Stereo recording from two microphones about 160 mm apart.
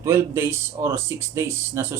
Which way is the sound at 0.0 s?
15° right (ahead or behind).